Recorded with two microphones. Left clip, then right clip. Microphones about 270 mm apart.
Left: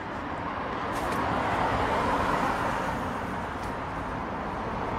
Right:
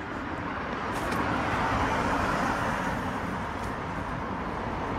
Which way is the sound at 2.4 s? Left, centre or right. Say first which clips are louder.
Left 1 dB; left.